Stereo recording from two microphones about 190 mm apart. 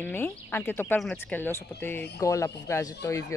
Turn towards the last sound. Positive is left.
turn(degrees=15)  # may be behind; listen again after turning